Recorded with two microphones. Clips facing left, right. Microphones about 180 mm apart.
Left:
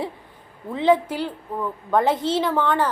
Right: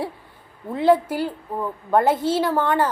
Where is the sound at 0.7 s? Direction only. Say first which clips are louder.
Right 1 dB; 5° right (ahead or behind).